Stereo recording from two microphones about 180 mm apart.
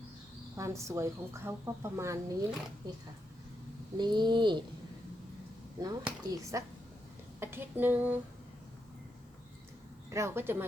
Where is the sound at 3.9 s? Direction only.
25° right (ahead or behind).